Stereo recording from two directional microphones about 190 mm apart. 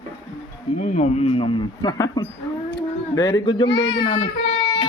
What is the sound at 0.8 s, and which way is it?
A man's voice, 40° left (ahead or behind).